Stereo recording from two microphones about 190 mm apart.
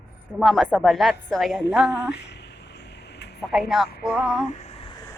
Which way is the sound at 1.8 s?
65° left (ahead or behind).